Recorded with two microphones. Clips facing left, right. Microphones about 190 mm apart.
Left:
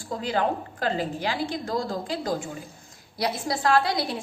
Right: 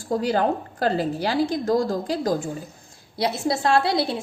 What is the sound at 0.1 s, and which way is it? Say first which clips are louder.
A woman's voice: right 5 dB; 40° right (ahead or behind).